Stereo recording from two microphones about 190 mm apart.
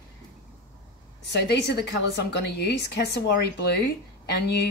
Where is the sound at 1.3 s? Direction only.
65° left (ahead or behind).